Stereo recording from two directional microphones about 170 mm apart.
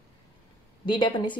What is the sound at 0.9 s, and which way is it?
Speech, 25° left (ahead or behind).